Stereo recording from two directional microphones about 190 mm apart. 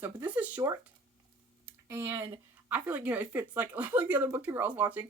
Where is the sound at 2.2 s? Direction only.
30° right (ahead or behind).